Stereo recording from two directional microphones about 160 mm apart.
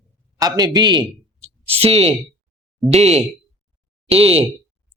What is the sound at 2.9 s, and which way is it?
Speech, 40° right (ahead or behind).